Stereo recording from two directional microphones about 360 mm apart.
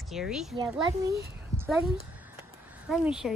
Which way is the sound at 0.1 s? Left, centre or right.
Centre.